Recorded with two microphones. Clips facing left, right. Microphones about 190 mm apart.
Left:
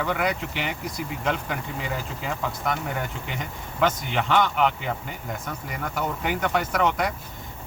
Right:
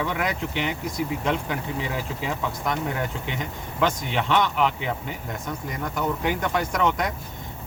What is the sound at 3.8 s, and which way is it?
Speech, centre (ahead or behind).